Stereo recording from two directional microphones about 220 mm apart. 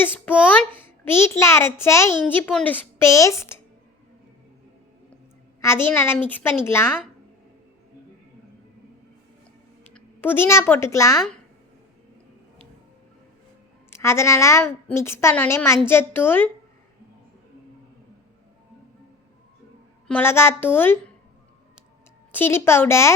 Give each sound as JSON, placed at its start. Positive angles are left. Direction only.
{"t": 0.7, "sound": "a woman's voice", "side_deg": 10}
{"t": 5.6, "sound": "a woman's voice", "side_deg": 10}
{"t": 9.9, "sound": "speech", "side_deg": 10}
{"t": 13.9, "sound": "a woman's voice", "side_deg": 10}
{"t": 20.1, "sound": "a woman's voice", "side_deg": 10}
{"t": 22.3, "sound": "a woman's voice", "side_deg": 10}